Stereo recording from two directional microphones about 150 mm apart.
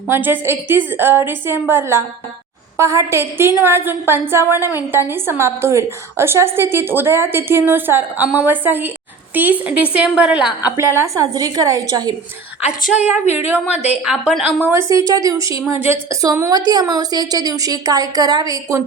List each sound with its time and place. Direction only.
0.1 s a woman's voice: 15° right (ahead or behind)
10.8 s a woman's voice: 15° right (ahead or behind)
13.3 s a woman's voice: 15° right (ahead or behind)
14.7 s a woman's voice: 20° right (ahead or behind)